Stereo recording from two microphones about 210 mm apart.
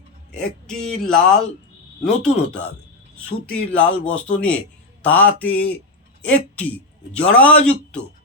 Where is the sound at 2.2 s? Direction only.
5° left (ahead or behind).